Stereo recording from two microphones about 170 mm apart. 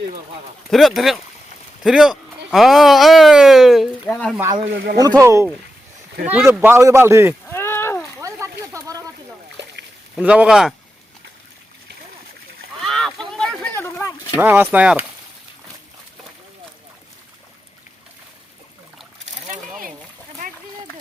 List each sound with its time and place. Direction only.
0.7 s speech: centre (ahead or behind)
4.4 s speech: 20° right (ahead or behind)
4.6 s speech: 90° right
5.2 s speech: 15° right (ahead or behind)
7.4 s a sound: 15° left (ahead or behind)
8.2 s a sound: 20° right (ahead or behind)
10.2 s speech: 5° right (ahead or behind)
12.8 s a sound: centre (ahead or behind)
14.3 s speech: 10° right (ahead or behind)